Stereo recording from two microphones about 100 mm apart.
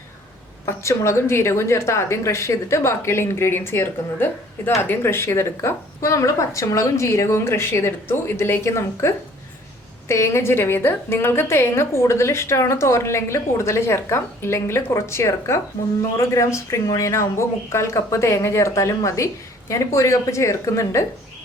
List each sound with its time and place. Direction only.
0.6 s a woman's voice: 30° left (ahead or behind)